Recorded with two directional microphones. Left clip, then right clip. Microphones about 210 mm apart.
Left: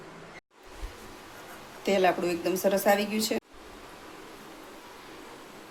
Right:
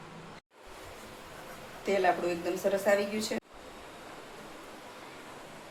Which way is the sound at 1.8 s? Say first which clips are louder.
Left 3 dB; 40° left (ahead or behind).